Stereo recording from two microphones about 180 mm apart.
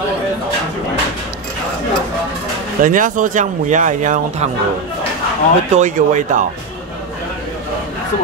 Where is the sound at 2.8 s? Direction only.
50° right (ahead or behind).